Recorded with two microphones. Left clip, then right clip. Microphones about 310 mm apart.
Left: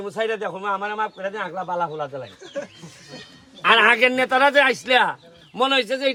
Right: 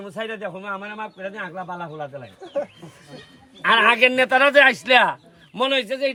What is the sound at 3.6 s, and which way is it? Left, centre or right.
A man's voice, centre.